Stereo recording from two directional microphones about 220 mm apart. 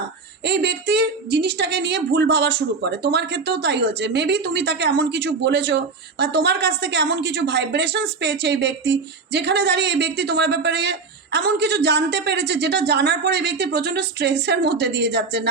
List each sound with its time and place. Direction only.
0.4 s a woman's voice: 50° right (ahead or behind)